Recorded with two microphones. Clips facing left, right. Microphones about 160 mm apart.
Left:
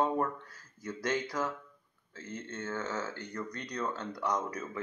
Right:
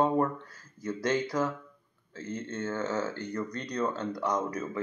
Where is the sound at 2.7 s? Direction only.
25° right (ahead or behind).